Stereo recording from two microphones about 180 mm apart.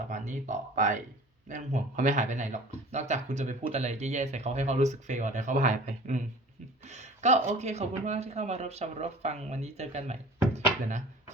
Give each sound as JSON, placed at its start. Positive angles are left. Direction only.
{"t": 0.1, "sound": "speech", "side_deg": -45}